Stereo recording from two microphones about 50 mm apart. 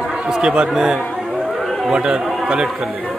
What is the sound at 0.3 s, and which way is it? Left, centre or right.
A man's voice, centre.